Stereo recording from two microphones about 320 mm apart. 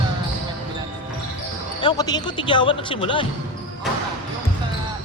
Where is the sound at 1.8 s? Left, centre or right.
Centre.